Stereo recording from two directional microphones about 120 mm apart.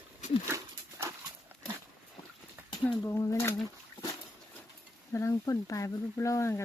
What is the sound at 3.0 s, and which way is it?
Speech, 25° left (ahead or behind).